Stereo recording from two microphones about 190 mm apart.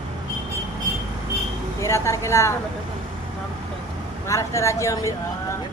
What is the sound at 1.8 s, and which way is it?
Speech, 15° left (ahead or behind).